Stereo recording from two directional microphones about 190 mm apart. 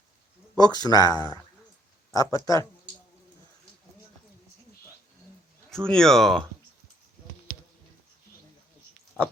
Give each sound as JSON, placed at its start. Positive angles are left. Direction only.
{"t": 0.5, "sound": "speech", "side_deg": 20}
{"t": 5.7, "sound": "speech", "side_deg": 5}